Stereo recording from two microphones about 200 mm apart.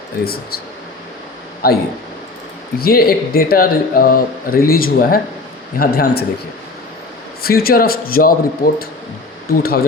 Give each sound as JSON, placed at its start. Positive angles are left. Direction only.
{"t": 1.6, "sound": "speech", "side_deg": 50}
{"t": 7.4, "sound": "speech", "side_deg": 50}